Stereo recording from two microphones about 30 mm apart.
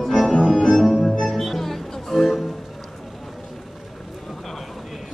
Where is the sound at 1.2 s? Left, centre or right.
Centre.